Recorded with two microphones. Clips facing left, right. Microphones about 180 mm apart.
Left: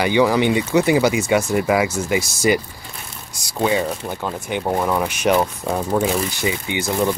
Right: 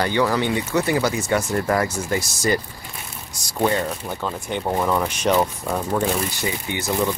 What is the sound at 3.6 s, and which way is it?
Speech, 5° left (ahead or behind).